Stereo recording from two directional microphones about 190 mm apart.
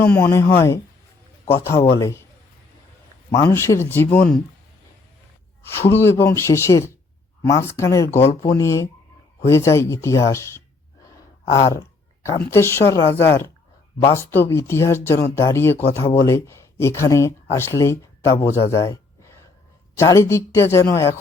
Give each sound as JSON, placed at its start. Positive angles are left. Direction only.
{"t": 0.0, "sound": "speech", "side_deg": 10}
{"t": 3.3, "sound": "speech", "side_deg": 15}
{"t": 5.7, "sound": "speech", "side_deg": 10}
{"t": 11.6, "sound": "a sound", "side_deg": 20}
{"t": 12.4, "sound": "speech", "side_deg": 15}
{"t": 18.7, "sound": "a sound", "side_deg": 15}
{"t": 20.0, "sound": "speech", "side_deg": 15}